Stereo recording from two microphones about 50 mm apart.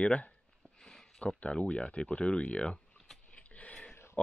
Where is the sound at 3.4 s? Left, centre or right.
Left.